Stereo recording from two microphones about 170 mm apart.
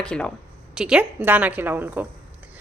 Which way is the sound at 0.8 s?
5° right (ahead or behind).